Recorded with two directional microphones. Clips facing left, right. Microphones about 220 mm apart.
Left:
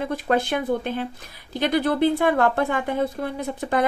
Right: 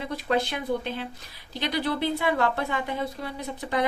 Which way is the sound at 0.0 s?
50° left (ahead or behind).